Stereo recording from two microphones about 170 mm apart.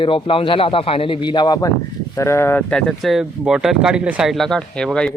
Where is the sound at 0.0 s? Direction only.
30° left (ahead or behind).